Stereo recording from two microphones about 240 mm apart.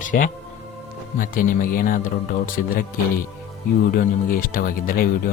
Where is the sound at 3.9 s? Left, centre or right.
Left.